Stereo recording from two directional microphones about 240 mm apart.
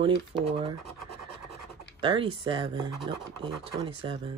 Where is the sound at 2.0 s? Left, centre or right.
Right.